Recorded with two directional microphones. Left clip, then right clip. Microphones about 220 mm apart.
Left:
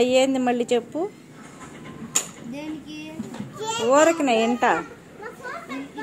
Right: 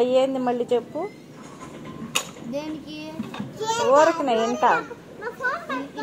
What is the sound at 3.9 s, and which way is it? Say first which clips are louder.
Speech: even; 45° left (ahead or behind).